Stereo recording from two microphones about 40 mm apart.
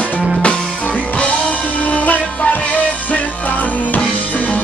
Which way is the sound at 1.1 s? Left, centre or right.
Left.